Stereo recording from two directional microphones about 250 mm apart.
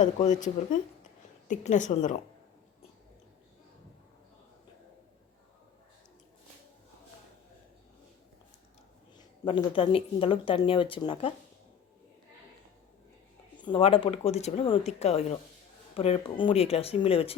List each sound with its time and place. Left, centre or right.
0.0 s speech: left
1.5 s speech: left
9.1 s speech: centre
13.6 s speech: centre